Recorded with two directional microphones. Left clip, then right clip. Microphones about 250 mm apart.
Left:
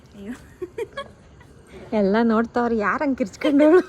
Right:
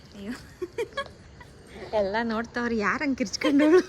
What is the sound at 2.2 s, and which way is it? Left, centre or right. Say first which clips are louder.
A woman's voice: left 8 dB; centre.